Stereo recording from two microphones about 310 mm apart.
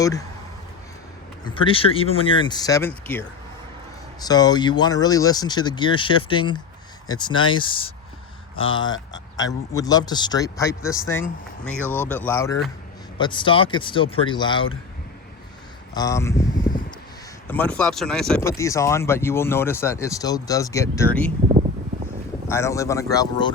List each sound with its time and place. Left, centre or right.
0.0 s speech: centre
1.5 s speech: centre
8.5 s speech: left
8.8 s speech: centre
16.0 s speech: centre
17.5 s speech: centre
22.4 s speech: centre